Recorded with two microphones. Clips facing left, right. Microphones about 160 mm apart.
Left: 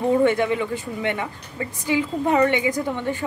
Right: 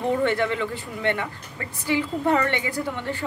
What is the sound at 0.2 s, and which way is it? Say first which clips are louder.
A woman's voice: left 4 dB; 15° left (ahead or behind).